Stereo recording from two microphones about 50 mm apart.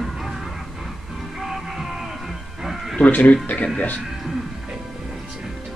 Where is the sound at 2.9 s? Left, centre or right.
Left.